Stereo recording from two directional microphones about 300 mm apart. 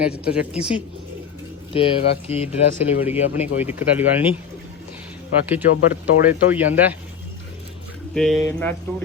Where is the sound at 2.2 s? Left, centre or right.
Left.